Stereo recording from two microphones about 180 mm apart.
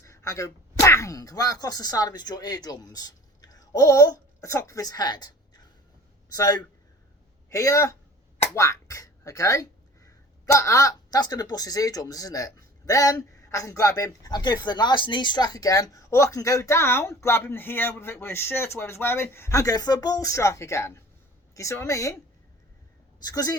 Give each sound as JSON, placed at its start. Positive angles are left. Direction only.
{"t": 0.0, "sound": "a man's voice", "side_deg": 15}
{"t": 23.2, "sound": "speech", "side_deg": 20}